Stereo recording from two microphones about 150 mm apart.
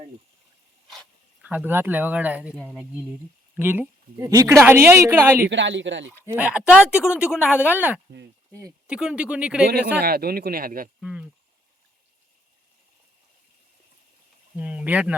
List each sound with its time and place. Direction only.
0.9 s dog: centre (ahead or behind)
1.5 s a woman's voice: 10° right (ahead or behind)
3.6 s a woman's voice: 15° right (ahead or behind)
9.6 s speech: 90° right; by 10.8 s 75° right (ahead or behind)
11.0 s a sound: 5° right (ahead or behind)
14.5 s a woman's voice: 10° right (ahead or behind)